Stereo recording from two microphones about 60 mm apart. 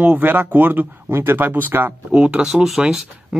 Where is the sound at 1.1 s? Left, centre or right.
Right.